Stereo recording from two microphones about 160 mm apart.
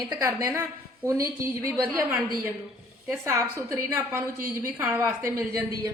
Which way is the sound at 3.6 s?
20° right (ahead or behind).